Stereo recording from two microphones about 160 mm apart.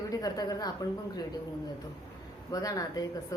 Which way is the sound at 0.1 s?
25° left (ahead or behind).